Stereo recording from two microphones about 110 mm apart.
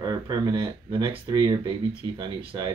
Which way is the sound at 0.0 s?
35° right (ahead or behind).